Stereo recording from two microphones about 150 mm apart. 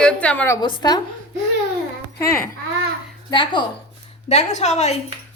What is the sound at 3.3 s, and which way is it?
Speech, 30° left (ahead or behind).